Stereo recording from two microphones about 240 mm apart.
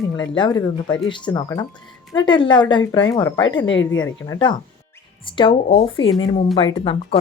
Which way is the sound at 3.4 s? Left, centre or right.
Left.